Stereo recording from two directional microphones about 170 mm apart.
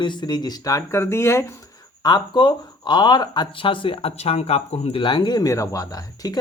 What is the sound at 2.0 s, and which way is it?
Speech, 25° left (ahead or behind).